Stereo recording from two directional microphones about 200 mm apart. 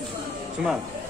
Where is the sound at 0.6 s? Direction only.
5° right (ahead or behind).